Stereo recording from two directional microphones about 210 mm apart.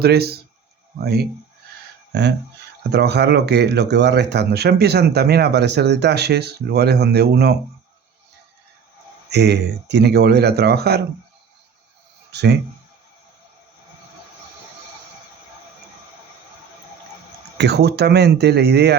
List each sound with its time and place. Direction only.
0.0 s speech: 50° right (ahead or behind)
9.3 s speech: 55° right (ahead or behind)
12.3 s speech: 55° right (ahead or behind)
17.6 s speech: 50° right (ahead or behind)